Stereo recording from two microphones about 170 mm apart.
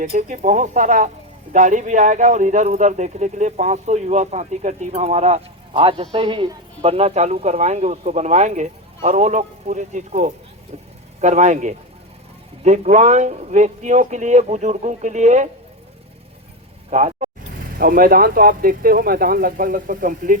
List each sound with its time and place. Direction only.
0.0 s speech: 50° right (ahead or behind)
16.9 s vehicle: 45° right (ahead or behind)
17.7 s speech: 60° right (ahead or behind)